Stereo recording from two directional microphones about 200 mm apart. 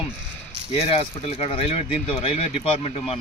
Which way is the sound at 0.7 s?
30° left (ahead or behind).